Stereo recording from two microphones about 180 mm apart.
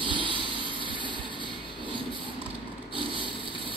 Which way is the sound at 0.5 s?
25° left (ahead or behind).